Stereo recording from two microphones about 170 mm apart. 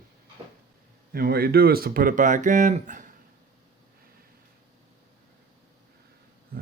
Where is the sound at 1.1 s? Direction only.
65° right (ahead or behind); by 3.1 s 50° right (ahead or behind).